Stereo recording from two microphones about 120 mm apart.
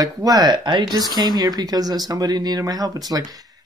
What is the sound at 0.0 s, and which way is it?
Speech, 30° right (ahead or behind).